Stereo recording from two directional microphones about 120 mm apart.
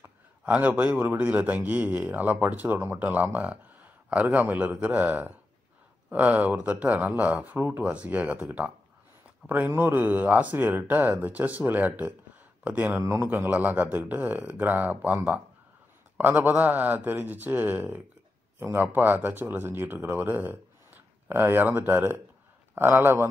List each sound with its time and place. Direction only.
0.0 s a man's voice: 15° right (ahead or behind)
16.2 s a man's voice: 15° right (ahead or behind)